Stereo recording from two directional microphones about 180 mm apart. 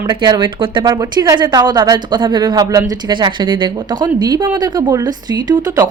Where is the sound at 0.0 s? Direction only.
25° right (ahead or behind).